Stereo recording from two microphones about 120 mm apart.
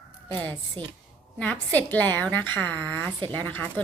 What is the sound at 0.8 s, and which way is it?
Speech, 45° right (ahead or behind).